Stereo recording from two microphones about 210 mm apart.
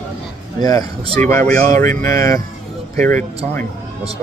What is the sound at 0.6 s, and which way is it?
Speech, 15° left (ahead or behind).